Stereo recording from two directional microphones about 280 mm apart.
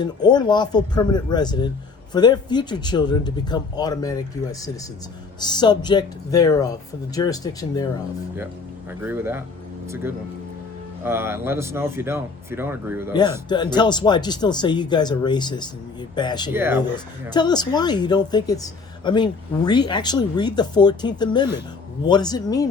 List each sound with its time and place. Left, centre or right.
0.0 s a woman's voice: centre
5.4 s a woman's voice: centre
8.9 s a man's voice: centre
11.0 s a man's voice: centre
13.5 s a woman's voice: centre
16.5 s a man's voice: centre
17.3 s a woman's voice: centre